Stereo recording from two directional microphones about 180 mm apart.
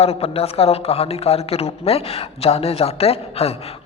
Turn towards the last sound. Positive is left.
turn(degrees=35)  # may be behind; listen again after turning